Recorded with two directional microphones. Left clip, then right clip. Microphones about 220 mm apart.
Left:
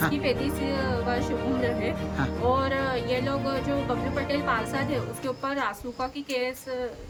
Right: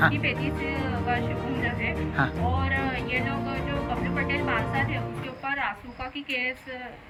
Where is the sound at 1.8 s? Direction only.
15° left (ahead or behind).